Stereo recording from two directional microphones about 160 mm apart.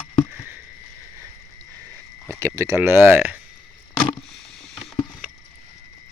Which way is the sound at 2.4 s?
15° right (ahead or behind).